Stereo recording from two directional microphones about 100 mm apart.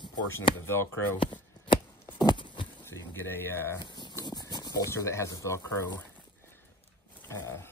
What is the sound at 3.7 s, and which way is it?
Speech, 50° left (ahead or behind).